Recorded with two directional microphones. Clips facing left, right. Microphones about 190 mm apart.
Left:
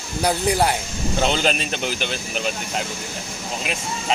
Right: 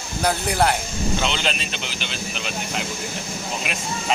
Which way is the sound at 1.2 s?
45° left (ahead or behind).